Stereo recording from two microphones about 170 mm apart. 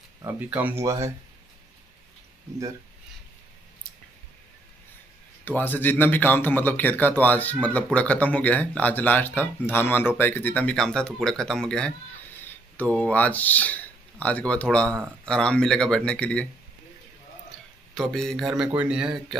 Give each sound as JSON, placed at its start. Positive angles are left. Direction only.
{"t": 0.2, "sound": "speech", "side_deg": -15}
{"t": 5.4, "sound": "a man's voice", "side_deg": 10}
{"t": 17.9, "sound": "speech", "side_deg": 5}